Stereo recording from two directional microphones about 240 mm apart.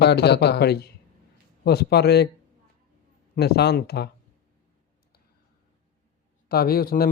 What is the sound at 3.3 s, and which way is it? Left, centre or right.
Speech, left.